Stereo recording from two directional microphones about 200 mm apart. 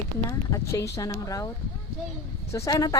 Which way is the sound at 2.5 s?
15° left (ahead or behind).